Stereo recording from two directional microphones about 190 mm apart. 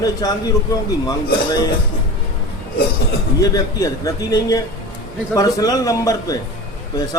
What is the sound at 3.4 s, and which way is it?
A man's voice, 15° left (ahead or behind).